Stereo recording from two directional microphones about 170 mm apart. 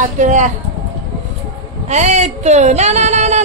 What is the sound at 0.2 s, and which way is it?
Speech, 45° right (ahead or behind).